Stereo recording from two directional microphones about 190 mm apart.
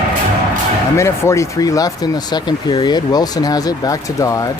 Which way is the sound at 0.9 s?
15° left (ahead or behind).